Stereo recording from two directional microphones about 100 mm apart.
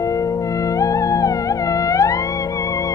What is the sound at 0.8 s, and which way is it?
Theremin, 35° left (ahead or behind).